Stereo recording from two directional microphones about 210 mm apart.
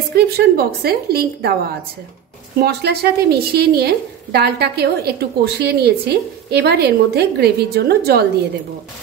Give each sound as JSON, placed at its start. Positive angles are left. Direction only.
{"t": 0.1, "sound": "a woman's voice", "side_deg": -50}
{"t": 2.6, "sound": "a woman's voice", "side_deg": -50}